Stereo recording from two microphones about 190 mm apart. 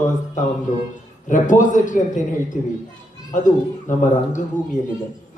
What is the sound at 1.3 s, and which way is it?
Speech, 40° left (ahead or behind).